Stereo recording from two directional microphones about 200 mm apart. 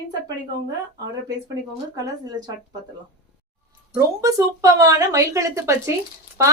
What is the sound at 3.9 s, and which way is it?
Speech, 15° right (ahead or behind).